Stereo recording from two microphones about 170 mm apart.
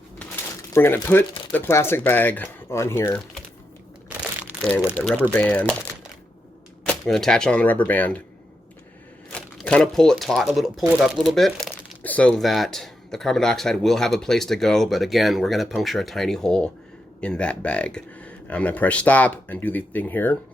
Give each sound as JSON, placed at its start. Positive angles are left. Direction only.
{"t": 0.7, "sound": "speech", "side_deg": 15}
{"t": 4.9, "sound": "speech", "side_deg": 10}
{"t": 6.8, "sound": "speech", "side_deg": 0}
{"t": 9.3, "sound": "speech", "side_deg": 5}